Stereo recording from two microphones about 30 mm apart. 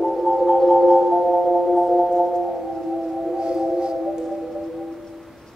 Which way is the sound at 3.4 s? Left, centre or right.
Right.